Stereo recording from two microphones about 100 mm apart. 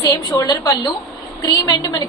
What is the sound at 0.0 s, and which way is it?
A woman's voice, 40° left (ahead or behind).